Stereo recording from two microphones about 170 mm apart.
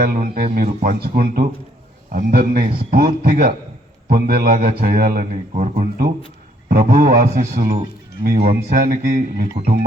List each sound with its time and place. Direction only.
0.0 s a man's voice: 55° right (ahead or behind)